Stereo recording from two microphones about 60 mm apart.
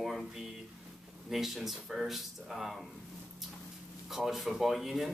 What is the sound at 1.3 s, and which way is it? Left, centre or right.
Speech, centre.